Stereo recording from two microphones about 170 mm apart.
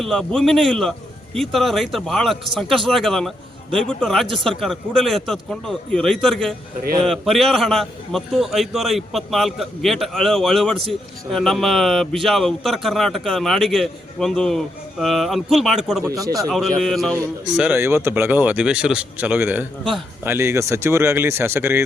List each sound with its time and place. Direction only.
0.0 s a man's voice: centre (ahead or behind)
16.2 s a man's voice: 20° right (ahead or behind)
16.5 s a man's voice: centre (ahead or behind)